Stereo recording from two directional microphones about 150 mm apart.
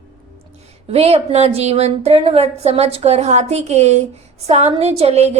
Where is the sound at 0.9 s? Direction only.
45° right (ahead or behind).